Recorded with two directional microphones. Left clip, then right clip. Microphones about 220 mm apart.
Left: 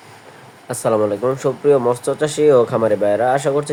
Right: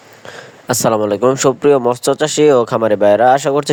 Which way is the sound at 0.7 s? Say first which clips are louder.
Right 3 dB; 45° right (ahead or behind).